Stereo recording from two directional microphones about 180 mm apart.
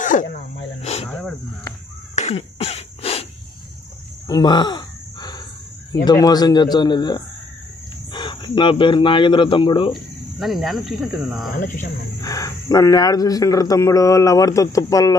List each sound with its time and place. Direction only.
0.0 s speech: 45° left (ahead or behind)
2.1 s cough: 35° left (ahead or behind)
4.3 s a sound: 25° left (ahead or behind)
6.0 s speech: 20° left (ahead or behind)
9.9 s speech: centre (ahead or behind)
11.6 s speech: 45° left (ahead or behind)
12.2 s speech: 20° left (ahead or behind)